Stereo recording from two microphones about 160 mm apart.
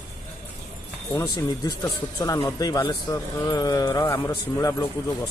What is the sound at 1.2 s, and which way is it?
A man's voice, 25° left (ahead or behind).